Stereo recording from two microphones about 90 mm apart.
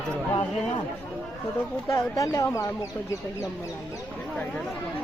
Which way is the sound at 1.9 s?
35° left (ahead or behind).